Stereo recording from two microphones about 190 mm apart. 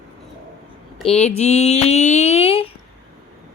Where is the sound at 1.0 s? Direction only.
35° left (ahead or behind).